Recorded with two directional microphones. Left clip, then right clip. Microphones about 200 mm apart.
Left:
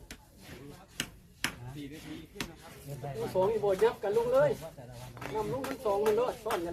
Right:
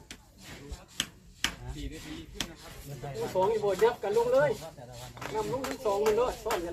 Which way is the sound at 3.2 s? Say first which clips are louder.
Right 1 dB; 20° right (ahead or behind).